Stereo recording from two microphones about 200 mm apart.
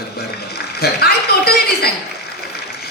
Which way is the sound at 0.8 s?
50° left (ahead or behind).